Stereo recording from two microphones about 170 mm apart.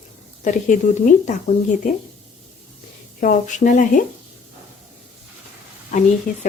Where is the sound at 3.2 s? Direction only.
50° left (ahead or behind).